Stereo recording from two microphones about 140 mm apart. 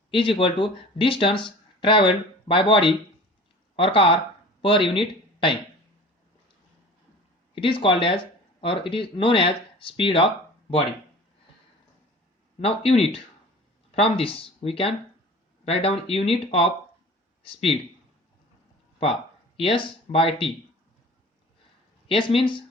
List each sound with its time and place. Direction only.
0.1 s speech: 40° left (ahead or behind)
7.5 s speech: 40° left (ahead or behind)
12.5 s speech: 50° left (ahead or behind)
19.5 s speech: 40° left (ahead or behind)
22.0 s speech: 40° left (ahead or behind)